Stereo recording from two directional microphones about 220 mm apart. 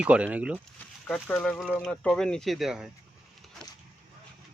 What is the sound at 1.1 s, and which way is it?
Speech, 5° left (ahead or behind).